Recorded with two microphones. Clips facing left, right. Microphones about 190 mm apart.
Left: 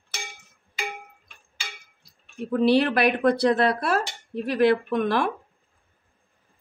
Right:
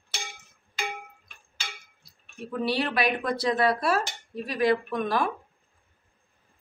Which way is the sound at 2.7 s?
60° left (ahead or behind).